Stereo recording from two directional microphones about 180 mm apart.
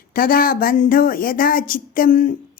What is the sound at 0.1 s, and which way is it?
Speech, 50° left (ahead or behind).